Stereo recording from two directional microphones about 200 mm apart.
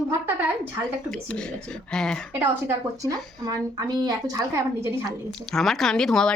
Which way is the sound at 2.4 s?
15° right (ahead or behind).